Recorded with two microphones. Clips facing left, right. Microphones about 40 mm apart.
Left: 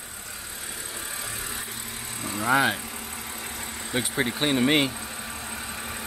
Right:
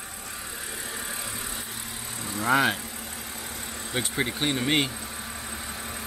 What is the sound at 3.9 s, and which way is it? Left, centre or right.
Speech, centre.